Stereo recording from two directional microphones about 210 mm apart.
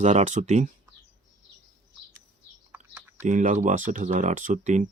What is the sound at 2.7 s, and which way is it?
Typing, 10° right (ahead or behind).